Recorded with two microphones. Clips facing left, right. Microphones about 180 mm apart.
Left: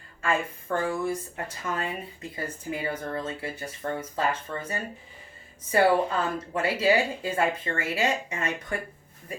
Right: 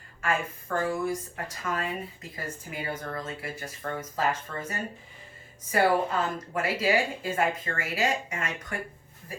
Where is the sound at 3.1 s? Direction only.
30° left (ahead or behind).